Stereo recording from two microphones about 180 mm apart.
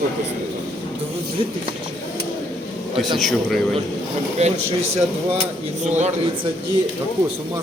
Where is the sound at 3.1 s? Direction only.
Centre (ahead or behind).